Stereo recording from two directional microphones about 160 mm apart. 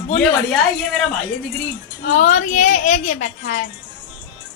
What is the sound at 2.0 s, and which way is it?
A woman's voice, 50° left (ahead or behind).